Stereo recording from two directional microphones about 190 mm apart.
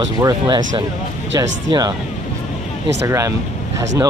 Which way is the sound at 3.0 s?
15° right (ahead or behind).